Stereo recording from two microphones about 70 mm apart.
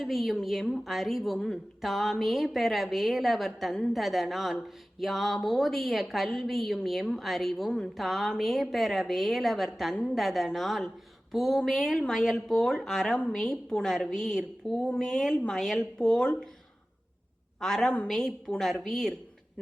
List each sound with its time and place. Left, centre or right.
0.0 s a woman's voice: centre
9.9 s a woman's voice: centre
10.2 s a woman's voice: centre
17.6 s a woman's voice: centre